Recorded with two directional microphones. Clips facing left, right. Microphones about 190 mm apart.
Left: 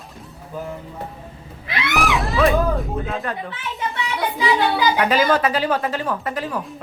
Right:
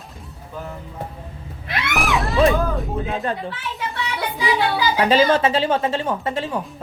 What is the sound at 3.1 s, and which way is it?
Speech, 30° right (ahead or behind).